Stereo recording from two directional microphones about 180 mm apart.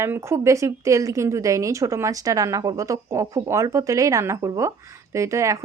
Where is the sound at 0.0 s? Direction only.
15° right (ahead or behind).